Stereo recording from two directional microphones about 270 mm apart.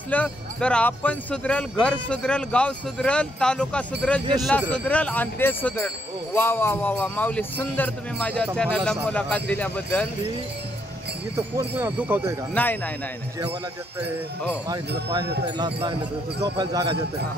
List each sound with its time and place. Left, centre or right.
0.1 s speech: centre
11.5 s speech: centre
12.5 s speech: centre
15.4 s speech: centre